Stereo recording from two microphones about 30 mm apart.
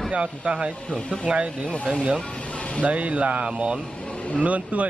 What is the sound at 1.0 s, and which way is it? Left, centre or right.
Speech, left.